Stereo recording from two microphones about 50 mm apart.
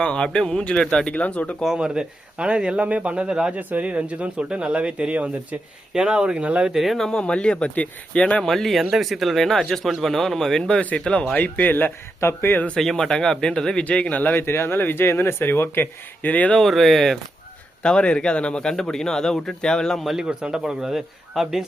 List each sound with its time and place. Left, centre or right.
0.0 s speech: centre
1.6 s a man's voice: centre
3.5 s speech: right
5.9 s a man's voice: centre
6.9 s speech: centre
8.4 s a man's voice: centre
11.3 s speech: left
12.2 s speech: left
12.7 s a man's voice: centre
13.8 s speech: left
14.3 s speech: left
16.6 s speech: centre
17.8 s a man's voice: left
20.1 s a man's voice: centre